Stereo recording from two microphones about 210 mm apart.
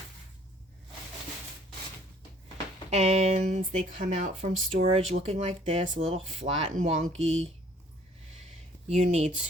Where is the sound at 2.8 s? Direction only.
30° right (ahead or behind).